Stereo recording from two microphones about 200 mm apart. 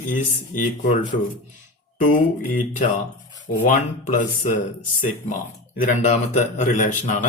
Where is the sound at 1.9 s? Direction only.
40° left (ahead or behind).